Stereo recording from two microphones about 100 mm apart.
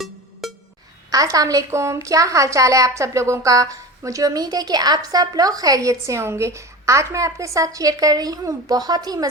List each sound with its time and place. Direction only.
0.4 s music: centre (ahead or behind)
1.1 s a woman's voice: 35° right (ahead or behind)